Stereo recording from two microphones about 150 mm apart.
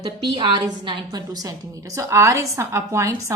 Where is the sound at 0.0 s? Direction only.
30° right (ahead or behind).